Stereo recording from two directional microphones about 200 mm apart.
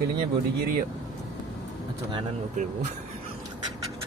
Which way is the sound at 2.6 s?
35° right (ahead or behind).